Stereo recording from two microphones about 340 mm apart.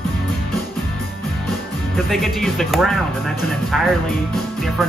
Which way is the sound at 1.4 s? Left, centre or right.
Centre.